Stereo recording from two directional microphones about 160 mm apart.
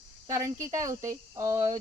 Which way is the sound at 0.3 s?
20° right (ahead or behind).